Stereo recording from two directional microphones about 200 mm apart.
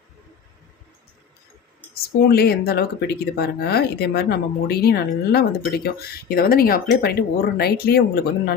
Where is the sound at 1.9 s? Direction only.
50° left (ahead or behind).